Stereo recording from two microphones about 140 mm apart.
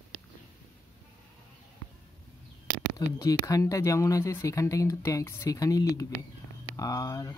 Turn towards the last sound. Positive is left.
turn(degrees=25)  # may be behind; listen again after turning